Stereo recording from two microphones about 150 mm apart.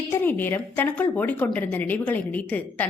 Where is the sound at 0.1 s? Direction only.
15° left (ahead or behind).